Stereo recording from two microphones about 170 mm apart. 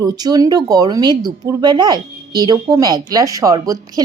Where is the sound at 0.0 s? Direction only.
25° right (ahead or behind).